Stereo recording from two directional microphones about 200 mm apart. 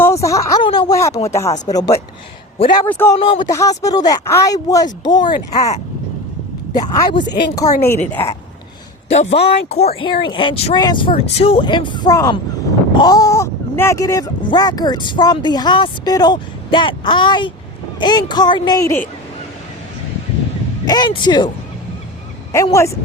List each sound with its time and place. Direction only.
0.0 s a sound: 15° left (ahead or behind)
1.3 s speech: 15° left (ahead or behind)
3.2 s speech: 25° left (ahead or behind)
3.5 s speech: 15° left (ahead or behind)
6.9 s speech: 20° left (ahead or behind)
9.0 s speech: 30° left (ahead or behind); by 19.0 s 15° left (ahead or behind)
20.8 s speech: 20° left (ahead or behind)
22.5 s speech: 15° left (ahead or behind)